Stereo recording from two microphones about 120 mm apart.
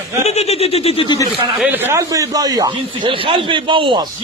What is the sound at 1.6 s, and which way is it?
A man's voice, 15° right (ahead or behind).